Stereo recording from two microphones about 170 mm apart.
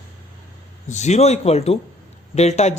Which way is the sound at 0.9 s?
40° left (ahead or behind).